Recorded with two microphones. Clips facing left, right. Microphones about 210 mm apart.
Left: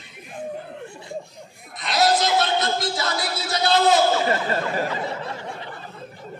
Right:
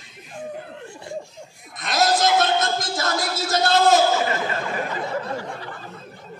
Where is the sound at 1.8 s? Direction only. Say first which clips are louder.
Even; 50° right (ahead or behind).